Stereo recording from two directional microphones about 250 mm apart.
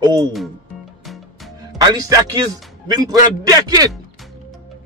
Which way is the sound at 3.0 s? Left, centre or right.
Centre.